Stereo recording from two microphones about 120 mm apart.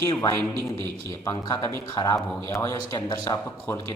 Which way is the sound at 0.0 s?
25° left (ahead or behind).